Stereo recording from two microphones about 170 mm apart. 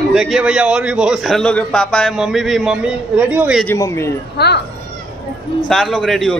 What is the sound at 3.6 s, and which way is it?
Speech, 15° left (ahead or behind).